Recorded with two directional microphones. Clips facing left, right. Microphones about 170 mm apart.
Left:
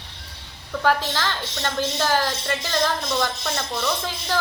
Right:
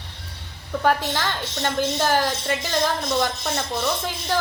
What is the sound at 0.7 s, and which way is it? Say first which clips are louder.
Speech: right 1 dB; 15° right (ahead or behind).